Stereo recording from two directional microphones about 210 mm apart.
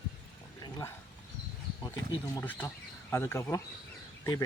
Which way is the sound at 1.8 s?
15° left (ahead or behind).